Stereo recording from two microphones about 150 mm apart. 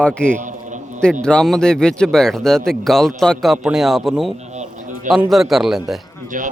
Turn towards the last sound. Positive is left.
turn(degrees=-60)  # may be behind; listen again after turning